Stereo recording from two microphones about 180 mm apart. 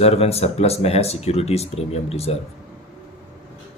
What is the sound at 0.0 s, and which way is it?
Speech, 35° left (ahead or behind).